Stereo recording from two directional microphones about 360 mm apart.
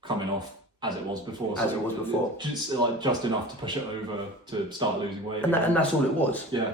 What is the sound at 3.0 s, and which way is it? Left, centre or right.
Speech, centre.